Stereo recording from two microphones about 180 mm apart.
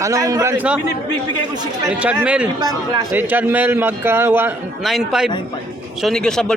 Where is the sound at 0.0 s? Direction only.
20° right (ahead or behind).